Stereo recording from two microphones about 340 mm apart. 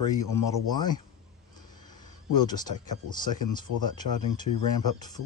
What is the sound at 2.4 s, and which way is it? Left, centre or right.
Speech, centre.